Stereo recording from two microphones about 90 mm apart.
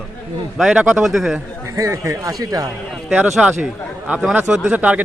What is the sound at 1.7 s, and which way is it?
Speech, 35° right (ahead or behind).